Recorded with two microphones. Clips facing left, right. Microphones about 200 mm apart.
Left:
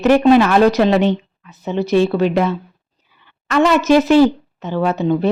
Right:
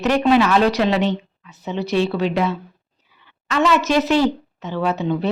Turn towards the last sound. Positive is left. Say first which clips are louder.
# left 4 dB
turn(degrees=45)  # may be behind; listen again after turning